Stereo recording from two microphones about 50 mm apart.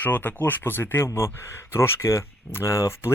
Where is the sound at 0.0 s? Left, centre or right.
Left.